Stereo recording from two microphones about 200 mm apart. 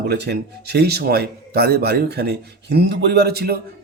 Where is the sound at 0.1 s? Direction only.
55° right (ahead or behind).